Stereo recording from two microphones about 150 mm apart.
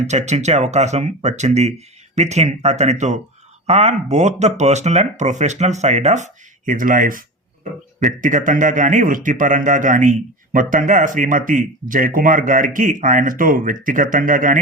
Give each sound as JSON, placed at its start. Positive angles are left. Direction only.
{"t": 0.1, "sound": "speech", "side_deg": -50}